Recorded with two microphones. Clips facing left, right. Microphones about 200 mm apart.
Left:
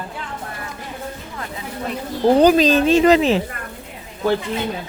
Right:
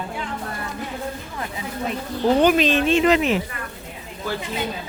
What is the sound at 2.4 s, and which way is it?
Speech, 35° left (ahead or behind).